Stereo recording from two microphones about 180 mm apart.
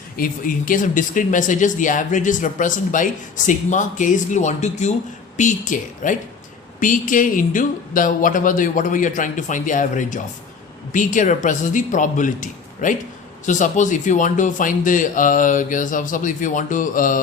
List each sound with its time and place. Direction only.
0.2 s speech: 50° left (ahead or behind)